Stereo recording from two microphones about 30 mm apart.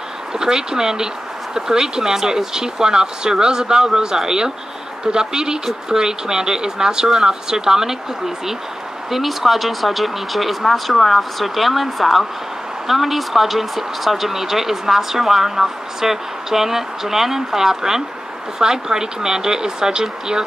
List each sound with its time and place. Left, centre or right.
0.3 s speech: right
9.1 s speech: centre; by 20.4 s right